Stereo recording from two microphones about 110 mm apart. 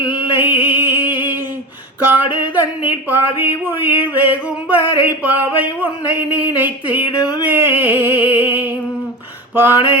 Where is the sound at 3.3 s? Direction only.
20° right (ahead or behind).